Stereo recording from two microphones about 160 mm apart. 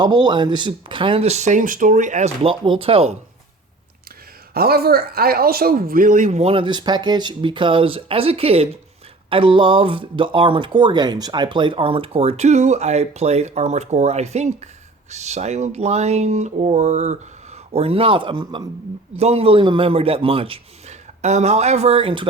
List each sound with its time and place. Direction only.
0.0 s speech: 25° right (ahead or behind)
4.5 s speech: 75° right (ahead or behind); by 22.3 s 30° right (ahead or behind)